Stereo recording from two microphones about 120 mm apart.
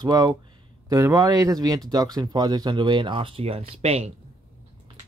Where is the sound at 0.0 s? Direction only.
35° right (ahead or behind); by 4.1 s 60° right (ahead or behind).